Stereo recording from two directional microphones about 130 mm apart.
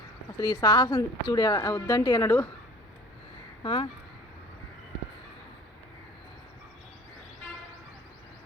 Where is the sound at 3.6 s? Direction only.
40° left (ahead or behind).